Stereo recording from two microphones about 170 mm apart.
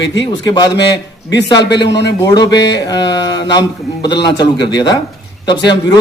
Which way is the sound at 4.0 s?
90° left.